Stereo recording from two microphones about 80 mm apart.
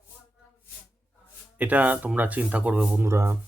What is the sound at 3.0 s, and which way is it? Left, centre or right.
Speech, right.